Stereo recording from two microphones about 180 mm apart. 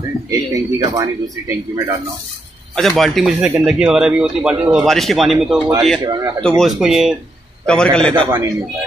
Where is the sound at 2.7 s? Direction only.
Centre (ahead or behind).